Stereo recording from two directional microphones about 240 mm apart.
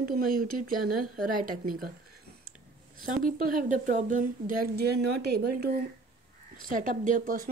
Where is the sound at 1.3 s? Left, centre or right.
Right.